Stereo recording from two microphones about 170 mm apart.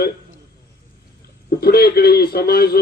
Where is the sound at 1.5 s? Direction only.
65° left (ahead or behind).